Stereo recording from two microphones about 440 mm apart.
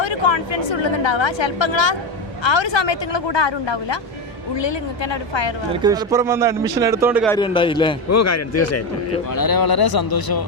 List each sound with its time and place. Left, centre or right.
0.0 s a woman's voice: left
5.7 s a man's voice: centre
7.3 s a man's voice: centre
8.1 s a man's voice: left
9.3 s speech: left